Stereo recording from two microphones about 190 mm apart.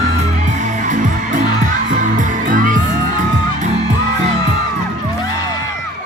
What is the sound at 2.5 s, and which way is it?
Music, 45° right (ahead or behind).